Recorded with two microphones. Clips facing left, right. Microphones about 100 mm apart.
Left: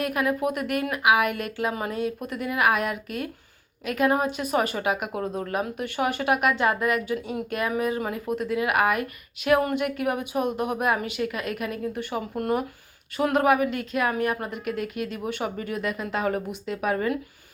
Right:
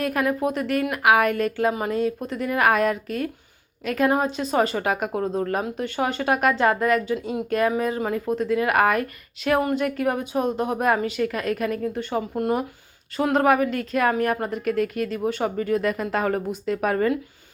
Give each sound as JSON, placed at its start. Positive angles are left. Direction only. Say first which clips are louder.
{"t": 0.0, "sound": "a woman's voice", "louder": "right 2 dB", "side_deg": -40}
{"t": 0.9, "sound": "a woman's voice", "louder": "right 3 dB", "side_deg": -45}